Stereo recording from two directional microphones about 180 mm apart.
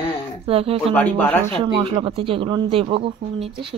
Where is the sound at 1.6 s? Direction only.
30° right (ahead or behind).